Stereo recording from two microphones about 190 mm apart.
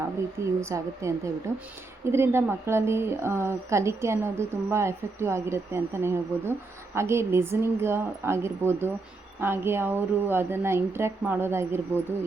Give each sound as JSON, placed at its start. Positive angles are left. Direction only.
{"t": 0.3, "sound": "a woman's voice", "side_deg": -15}